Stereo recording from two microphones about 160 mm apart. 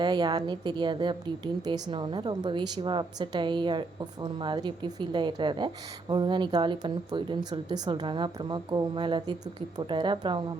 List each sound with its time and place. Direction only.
0.0 s a woman's voice: 25° right (ahead or behind)